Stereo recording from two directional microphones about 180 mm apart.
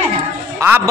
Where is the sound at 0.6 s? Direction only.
10° right (ahead or behind).